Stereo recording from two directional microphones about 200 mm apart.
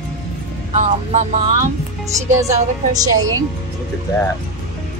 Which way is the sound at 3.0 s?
20° right (ahead or behind).